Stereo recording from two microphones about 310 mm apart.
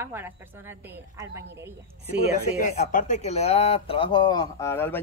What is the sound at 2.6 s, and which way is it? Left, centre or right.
Speech, left.